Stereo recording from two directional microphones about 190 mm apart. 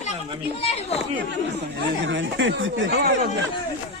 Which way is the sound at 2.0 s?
75° right (ahead or behind).